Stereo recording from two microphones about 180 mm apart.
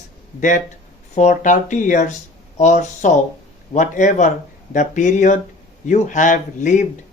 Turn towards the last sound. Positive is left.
turn(degrees=45)  # may be behind; listen again after turning